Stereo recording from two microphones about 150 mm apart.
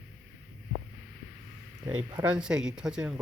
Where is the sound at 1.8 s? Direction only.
25° right (ahead or behind).